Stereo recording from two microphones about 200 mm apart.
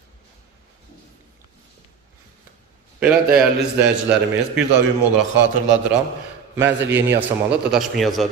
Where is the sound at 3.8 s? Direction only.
5° right (ahead or behind).